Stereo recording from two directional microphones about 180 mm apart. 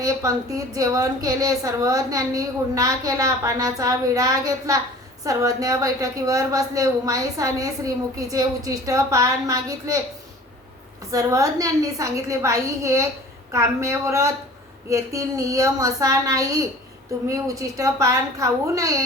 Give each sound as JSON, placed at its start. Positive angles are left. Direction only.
{"t": 0.0, "sound": "a woman's voice", "side_deg": -20}
{"t": 11.1, "sound": "a woman's voice", "side_deg": -20}